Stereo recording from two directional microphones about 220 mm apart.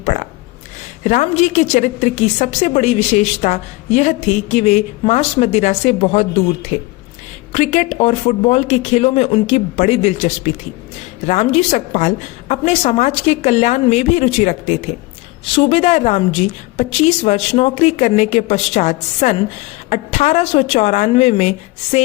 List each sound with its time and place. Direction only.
1.0 s a woman's voice: 30° left (ahead or behind)